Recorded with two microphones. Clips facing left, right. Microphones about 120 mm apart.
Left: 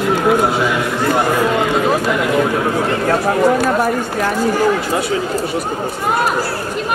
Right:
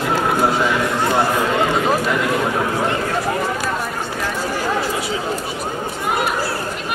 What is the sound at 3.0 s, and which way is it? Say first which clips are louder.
Chatter: left 7 dB; 60° left (ahead or behind).